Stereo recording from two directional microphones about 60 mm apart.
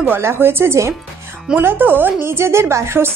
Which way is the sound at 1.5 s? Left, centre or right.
Right.